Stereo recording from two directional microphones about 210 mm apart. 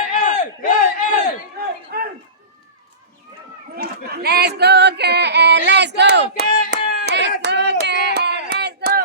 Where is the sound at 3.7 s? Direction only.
50° right (ahead or behind).